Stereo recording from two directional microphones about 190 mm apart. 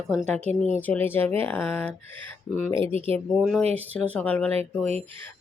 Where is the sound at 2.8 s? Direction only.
30° right (ahead or behind).